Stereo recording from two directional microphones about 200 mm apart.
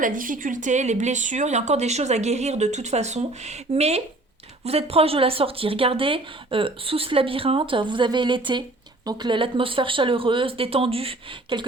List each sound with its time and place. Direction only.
0.0 s speech: 40° right (ahead or behind); by 11.6 s 25° right (ahead or behind)